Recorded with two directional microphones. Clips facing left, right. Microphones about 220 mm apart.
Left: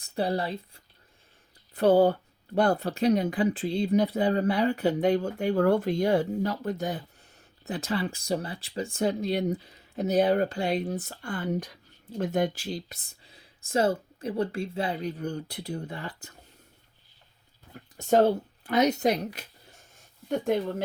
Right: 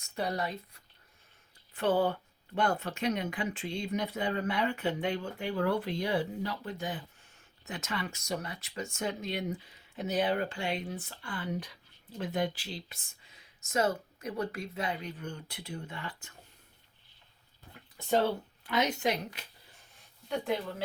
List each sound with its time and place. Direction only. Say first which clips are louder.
0.0 s speech: left 6 dB; 30° left (ahead or behind)
17.9 s speech: left 7 dB; 45° left (ahead or behind)